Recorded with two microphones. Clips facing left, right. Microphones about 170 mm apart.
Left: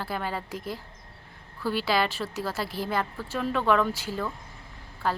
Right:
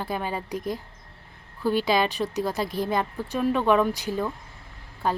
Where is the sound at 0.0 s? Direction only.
15° right (ahead or behind).